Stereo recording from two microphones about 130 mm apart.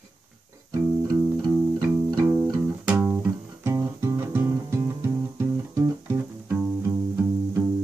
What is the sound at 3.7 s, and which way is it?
Music, 25° right (ahead or behind).